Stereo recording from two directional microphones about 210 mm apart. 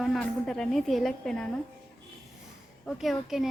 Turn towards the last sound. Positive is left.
turn(degrees=0)  # may be behind; listen again after turning